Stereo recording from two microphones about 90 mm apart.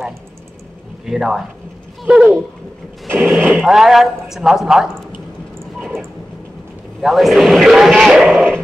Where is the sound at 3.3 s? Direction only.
20° right (ahead or behind).